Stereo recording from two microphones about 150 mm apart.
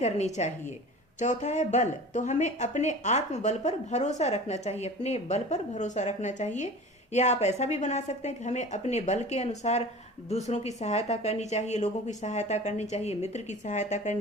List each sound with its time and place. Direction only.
0.0 s speech: 50° left (ahead or behind)